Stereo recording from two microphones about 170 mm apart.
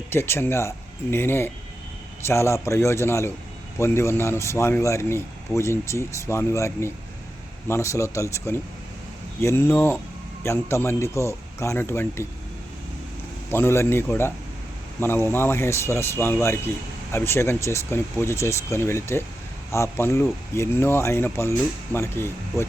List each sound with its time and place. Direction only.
0.1 s speech: 15° left (ahead or behind)
13.5 s speech: 15° left (ahead or behind)